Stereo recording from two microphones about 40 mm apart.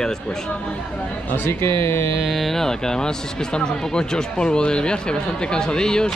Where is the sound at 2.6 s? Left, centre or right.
Centre.